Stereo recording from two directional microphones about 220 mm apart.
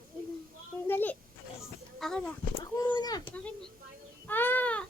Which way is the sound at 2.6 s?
20° left (ahead or behind).